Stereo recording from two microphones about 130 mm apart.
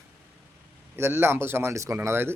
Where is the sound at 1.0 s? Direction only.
15° right (ahead or behind).